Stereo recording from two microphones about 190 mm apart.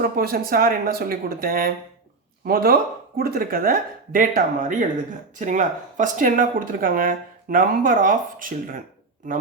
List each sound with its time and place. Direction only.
0.0 s speech: 50° right (ahead or behind)